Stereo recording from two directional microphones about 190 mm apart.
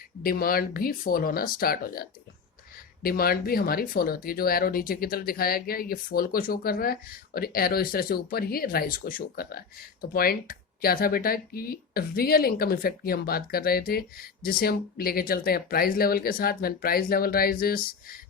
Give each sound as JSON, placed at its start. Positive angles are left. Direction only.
{"t": 0.2, "sound": "speech", "side_deg": 50}